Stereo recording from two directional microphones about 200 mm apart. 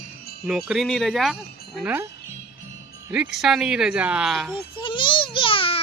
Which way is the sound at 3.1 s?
5° right (ahead or behind).